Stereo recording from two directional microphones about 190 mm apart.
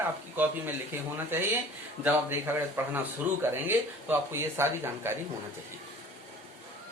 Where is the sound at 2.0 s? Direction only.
10° right (ahead or behind).